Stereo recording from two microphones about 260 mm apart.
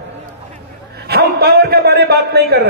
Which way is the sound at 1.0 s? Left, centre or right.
Right.